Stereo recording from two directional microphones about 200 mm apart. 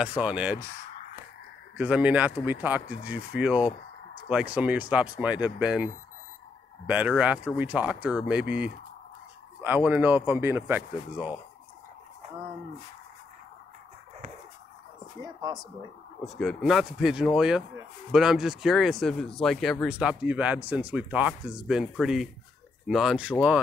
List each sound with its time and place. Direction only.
0.0 s speech: 5° right (ahead or behind)
1.8 s speech: 5° right (ahead or behind)
6.9 s speech: 5° right (ahead or behind)
15.2 s speech: 20° right (ahead or behind)
16.3 s speech: centre (ahead or behind)